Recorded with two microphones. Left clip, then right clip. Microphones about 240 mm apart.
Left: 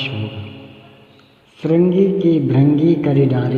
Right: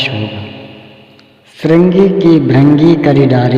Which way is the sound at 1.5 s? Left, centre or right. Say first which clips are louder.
Right 6 dB; right.